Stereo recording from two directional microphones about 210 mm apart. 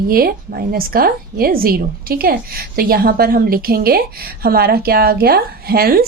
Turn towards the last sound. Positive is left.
turn(degrees=-45)  # may be behind; listen again after turning